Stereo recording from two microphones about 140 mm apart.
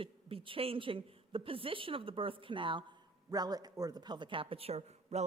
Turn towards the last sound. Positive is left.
turn(degrees=-50)  # may be behind; listen again after turning